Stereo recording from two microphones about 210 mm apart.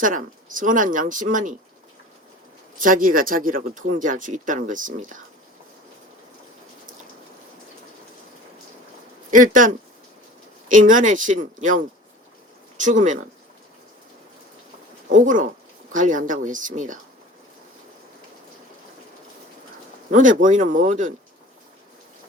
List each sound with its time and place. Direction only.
0.0 s speech: 40° right (ahead or behind)
2.7 s speech: 40° right (ahead or behind)
9.3 s speech: 40° right (ahead or behind)
15.1 s speech: 40° right (ahead or behind)
20.1 s speech: 40° right (ahead or behind)